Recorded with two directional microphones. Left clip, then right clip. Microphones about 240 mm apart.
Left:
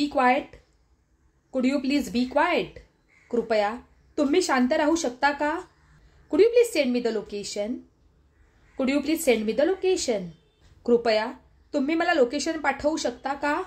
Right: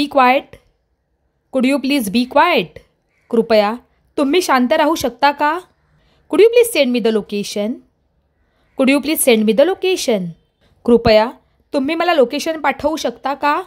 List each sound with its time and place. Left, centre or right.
0.0 s a woman's voice: right
8.7 s a woman's voice: right